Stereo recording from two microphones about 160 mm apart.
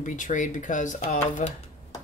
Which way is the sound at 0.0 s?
50° left (ahead or behind).